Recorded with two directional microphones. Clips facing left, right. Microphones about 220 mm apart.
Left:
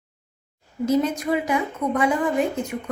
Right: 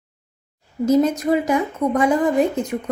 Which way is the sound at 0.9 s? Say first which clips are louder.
Right 5 dB; 40° right (ahead or behind).